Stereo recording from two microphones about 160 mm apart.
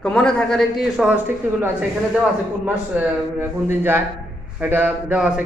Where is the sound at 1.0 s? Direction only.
10° right (ahead or behind).